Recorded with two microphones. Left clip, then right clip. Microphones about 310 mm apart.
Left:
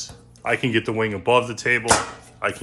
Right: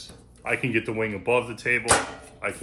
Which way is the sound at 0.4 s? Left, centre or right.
Left.